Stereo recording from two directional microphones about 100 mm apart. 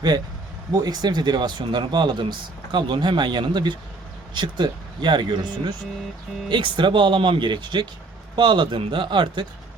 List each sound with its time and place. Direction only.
0.7 s speech: 40° right (ahead or behind)